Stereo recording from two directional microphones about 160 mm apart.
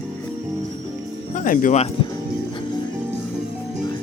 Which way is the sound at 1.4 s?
55° left (ahead or behind).